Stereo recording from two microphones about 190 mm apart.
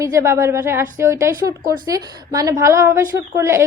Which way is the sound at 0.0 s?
15° right (ahead or behind).